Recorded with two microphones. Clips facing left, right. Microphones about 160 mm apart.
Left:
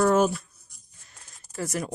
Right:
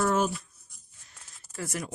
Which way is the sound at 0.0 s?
50° left (ahead or behind).